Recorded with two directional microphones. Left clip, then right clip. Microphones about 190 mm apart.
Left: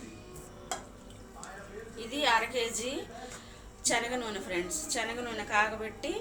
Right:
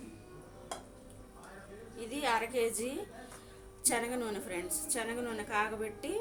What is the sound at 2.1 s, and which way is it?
Speech, 45° right (ahead or behind).